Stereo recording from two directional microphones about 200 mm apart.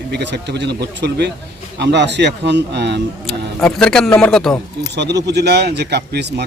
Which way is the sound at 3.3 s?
5° left (ahead or behind).